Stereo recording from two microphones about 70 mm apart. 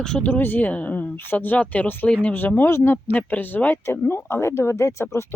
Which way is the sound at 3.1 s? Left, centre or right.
Left.